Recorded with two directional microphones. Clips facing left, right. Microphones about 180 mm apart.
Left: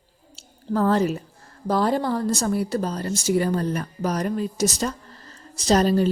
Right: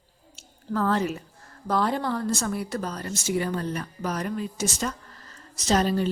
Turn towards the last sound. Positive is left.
turn(degrees=40)  # may be behind; listen again after turning